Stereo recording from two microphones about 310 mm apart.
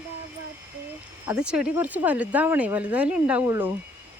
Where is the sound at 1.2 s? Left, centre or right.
Centre.